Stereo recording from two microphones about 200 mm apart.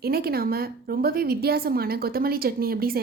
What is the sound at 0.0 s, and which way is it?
A woman's voice, 50° right (ahead or behind).